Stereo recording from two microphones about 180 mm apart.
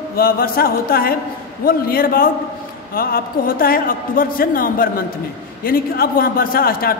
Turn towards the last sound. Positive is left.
turn(degrees=55)  # may be behind; listen again after turning